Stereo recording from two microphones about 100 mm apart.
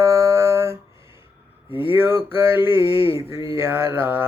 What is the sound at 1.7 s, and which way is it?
Speech, 65° left (ahead or behind).